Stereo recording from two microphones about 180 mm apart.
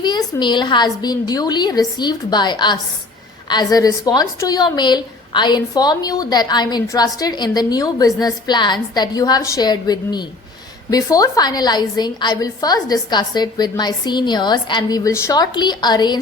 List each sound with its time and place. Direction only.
0.0 s a woman's voice: 25° left (ahead or behind)